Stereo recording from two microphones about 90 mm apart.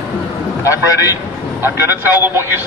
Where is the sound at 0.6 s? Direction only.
35° left (ahead or behind).